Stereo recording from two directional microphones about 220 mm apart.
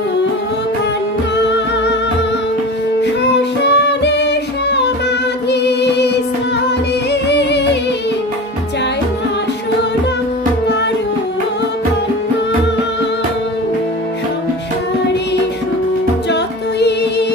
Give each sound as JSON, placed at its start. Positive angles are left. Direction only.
{"t": 3.6, "sound": "music", "side_deg": 50}
{"t": 5.5, "sound": "singing", "side_deg": 50}
{"t": 7.1, "sound": "music", "side_deg": 50}